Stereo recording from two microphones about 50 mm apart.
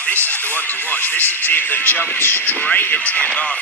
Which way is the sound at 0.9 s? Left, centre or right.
Left.